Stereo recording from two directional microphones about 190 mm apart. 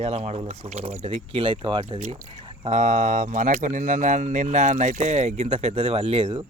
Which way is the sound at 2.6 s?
40° right (ahead or behind).